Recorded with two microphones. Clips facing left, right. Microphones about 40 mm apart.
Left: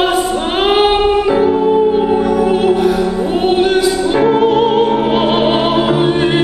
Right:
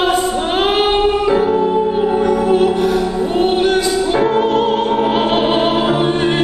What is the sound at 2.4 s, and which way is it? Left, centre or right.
Music, centre.